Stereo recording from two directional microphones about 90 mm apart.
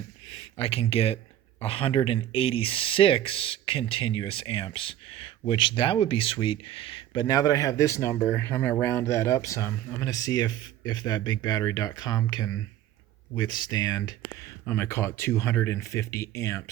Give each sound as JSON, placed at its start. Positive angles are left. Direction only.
{"t": 0.3, "sound": "speech", "side_deg": 90}
{"t": 14.7, "sound": "speech", "side_deg": 25}